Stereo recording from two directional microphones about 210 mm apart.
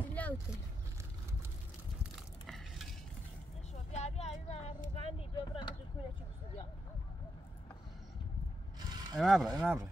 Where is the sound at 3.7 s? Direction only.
30° left (ahead or behind).